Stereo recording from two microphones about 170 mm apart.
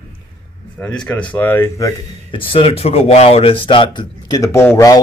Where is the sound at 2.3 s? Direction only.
30° left (ahead or behind).